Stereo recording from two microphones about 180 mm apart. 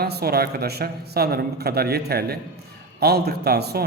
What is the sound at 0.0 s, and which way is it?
A man's voice, 60° right (ahead or behind).